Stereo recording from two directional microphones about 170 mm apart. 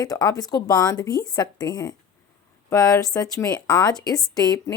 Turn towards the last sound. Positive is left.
turn(degrees=25)  # may be behind; listen again after turning